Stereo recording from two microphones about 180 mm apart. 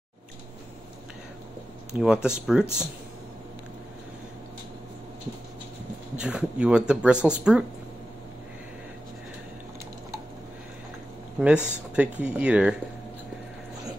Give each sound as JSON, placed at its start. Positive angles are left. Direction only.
{"t": 2.0, "sound": "speech", "side_deg": -5}
{"t": 6.1, "sound": "speech", "side_deg": -5}
{"t": 11.3, "sound": "speech", "side_deg": -5}